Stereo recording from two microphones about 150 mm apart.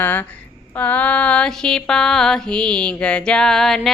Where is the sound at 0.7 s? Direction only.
10° left (ahead or behind).